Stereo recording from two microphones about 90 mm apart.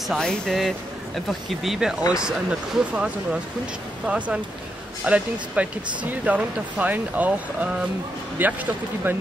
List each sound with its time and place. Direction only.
0.2 s a man's voice: 10° left (ahead or behind); by 9.1 s 20° right (ahead or behind)